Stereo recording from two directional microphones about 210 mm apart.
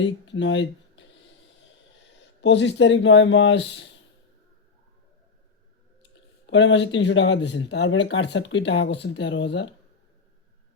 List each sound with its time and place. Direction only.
0.0 s speech: 60° left (ahead or behind)
2.4 s speech: 55° left (ahead or behind)
6.5 s speech: 60° left (ahead or behind)